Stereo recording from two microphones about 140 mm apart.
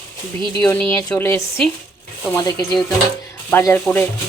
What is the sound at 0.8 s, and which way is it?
Speech, 10° left (ahead or behind).